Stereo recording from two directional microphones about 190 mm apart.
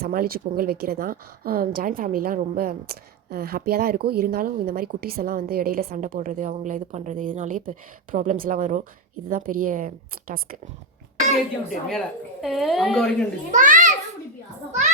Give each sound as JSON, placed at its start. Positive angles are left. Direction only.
{"t": 0.0, "sound": "a woman's voice", "side_deg": -50}
{"t": 11.9, "sound": "speech", "side_deg": 0}
{"t": 13.5, "sound": "a child's voice", "side_deg": -40}